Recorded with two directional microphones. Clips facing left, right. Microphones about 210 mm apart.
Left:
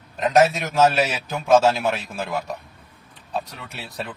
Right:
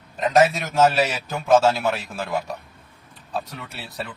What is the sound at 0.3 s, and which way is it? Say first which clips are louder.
A man's voice: even; centre (ahead or behind).